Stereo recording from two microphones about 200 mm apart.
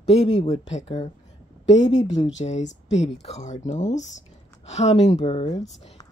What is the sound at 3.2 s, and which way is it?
A woman's voice, 35° left (ahead or behind).